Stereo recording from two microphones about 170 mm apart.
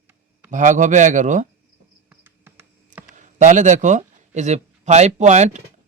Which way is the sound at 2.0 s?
10° right (ahead or behind).